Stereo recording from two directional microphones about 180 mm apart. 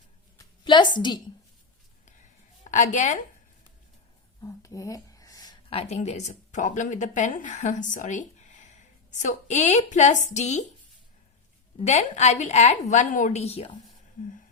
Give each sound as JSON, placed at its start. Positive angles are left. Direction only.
{"t": 0.6, "sound": "a woman's voice", "side_deg": 25}
{"t": 2.6, "sound": "a woman's voice", "side_deg": 40}
{"t": 4.4, "sound": "a sound", "side_deg": 15}
{"t": 5.7, "sound": "speech", "side_deg": 35}
{"t": 11.8, "sound": "a woman's voice", "side_deg": 40}